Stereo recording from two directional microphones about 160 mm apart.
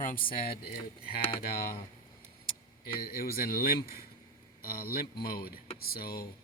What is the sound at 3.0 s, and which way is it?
A man's voice, 65° left (ahead or behind).